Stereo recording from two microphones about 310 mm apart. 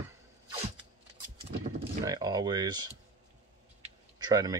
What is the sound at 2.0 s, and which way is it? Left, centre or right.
Speech, centre.